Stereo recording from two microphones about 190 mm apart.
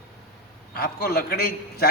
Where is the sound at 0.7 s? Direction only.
55° left (ahead or behind).